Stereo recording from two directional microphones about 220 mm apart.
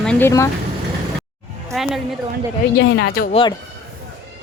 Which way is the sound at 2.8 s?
50° left (ahead or behind).